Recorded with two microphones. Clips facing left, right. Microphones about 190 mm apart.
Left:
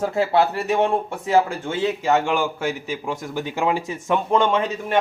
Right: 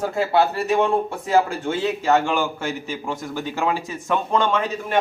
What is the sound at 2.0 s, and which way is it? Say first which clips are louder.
A man's voice: right 1 dB; 15° left (ahead or behind).